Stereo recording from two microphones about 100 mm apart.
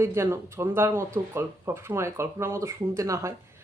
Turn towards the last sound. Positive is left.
turn(degrees=-30)  # may be behind; listen again after turning